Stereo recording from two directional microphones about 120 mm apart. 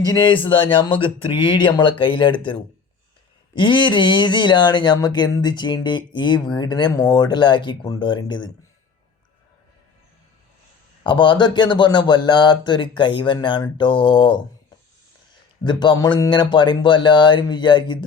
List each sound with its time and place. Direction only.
0.0 s speech: 40° left (ahead or behind)
11.0 s speech: 40° left (ahead or behind)
15.6 s speech: 40° left (ahead or behind)